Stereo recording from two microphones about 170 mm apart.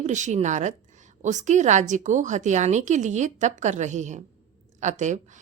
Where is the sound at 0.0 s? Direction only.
45° right (ahead or behind).